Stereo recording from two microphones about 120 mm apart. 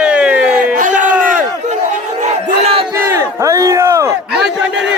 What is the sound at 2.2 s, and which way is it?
Crowd, 55° right (ahead or behind).